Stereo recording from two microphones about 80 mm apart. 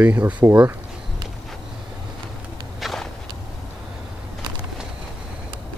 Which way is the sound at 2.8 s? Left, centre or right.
Centre.